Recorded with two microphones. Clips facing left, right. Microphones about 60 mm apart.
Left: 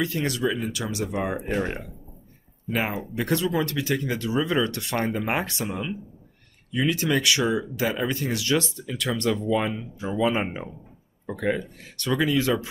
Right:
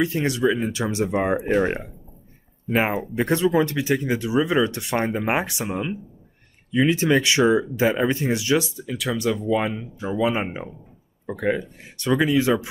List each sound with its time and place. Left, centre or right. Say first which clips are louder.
0.0 s speech: right 4 dB; right
1.3 s speech: right 6 dB; centre
3.2 s speech: right 5 dB; right
8.5 s speech: right 2 dB; centre